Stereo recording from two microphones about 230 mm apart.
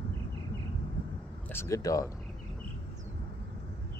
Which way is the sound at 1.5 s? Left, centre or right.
Centre.